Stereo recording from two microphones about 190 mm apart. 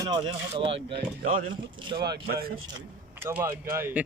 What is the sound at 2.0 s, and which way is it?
Speech, 55° right (ahead or behind).